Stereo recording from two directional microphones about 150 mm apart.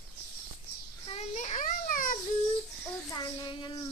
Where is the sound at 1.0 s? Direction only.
45° left (ahead or behind); by 2.1 s 65° left (ahead or behind).